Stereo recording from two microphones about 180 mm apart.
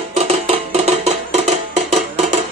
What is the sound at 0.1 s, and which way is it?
Music, 35° right (ahead or behind).